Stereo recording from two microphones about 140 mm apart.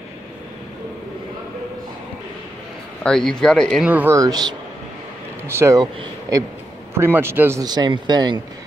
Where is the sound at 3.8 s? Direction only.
10° right (ahead or behind).